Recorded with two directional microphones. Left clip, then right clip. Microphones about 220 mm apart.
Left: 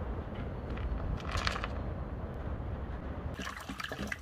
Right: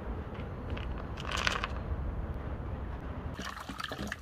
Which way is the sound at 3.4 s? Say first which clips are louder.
Right 1 dB; 15° right (ahead or behind).